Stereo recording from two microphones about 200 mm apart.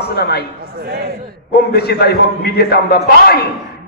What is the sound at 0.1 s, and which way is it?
Speech, 50° left (ahead or behind).